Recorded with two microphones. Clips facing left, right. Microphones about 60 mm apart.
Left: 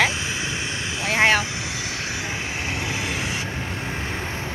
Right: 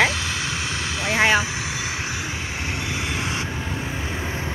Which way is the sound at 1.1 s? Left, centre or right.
Centre.